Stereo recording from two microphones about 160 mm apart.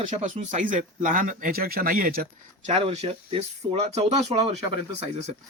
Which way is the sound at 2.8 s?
40° right (ahead or behind).